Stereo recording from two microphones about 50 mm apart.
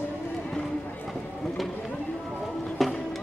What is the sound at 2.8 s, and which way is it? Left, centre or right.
Music, centre.